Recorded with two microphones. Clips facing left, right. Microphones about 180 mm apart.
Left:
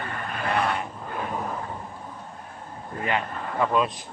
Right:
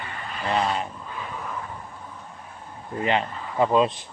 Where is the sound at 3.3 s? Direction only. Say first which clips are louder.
Left 2 dB; 55° left (ahead or behind).